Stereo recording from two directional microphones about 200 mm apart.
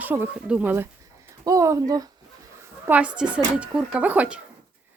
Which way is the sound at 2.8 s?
5° right (ahead or behind).